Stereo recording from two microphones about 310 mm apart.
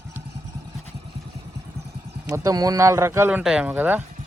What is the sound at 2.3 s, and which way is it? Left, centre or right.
A man's voice, centre.